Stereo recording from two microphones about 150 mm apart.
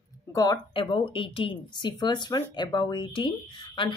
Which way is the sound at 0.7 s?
35° left (ahead or behind).